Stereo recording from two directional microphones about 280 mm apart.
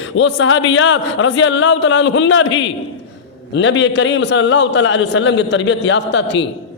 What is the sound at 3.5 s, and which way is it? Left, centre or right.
A man's voice, left.